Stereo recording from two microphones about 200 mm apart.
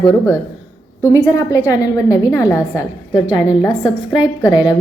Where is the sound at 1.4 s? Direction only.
15° left (ahead or behind).